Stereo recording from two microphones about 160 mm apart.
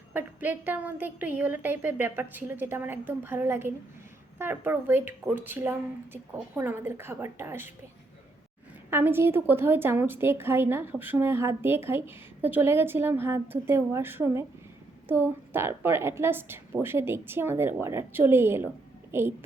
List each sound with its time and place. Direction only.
0.1 s a woman's voice: 10° right (ahead or behind)
8.9 s a woman's voice: 15° right (ahead or behind)